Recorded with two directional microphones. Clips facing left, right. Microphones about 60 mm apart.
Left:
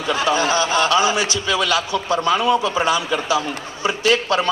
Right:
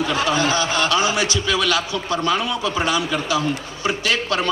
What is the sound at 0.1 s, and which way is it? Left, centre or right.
A man's voice, left.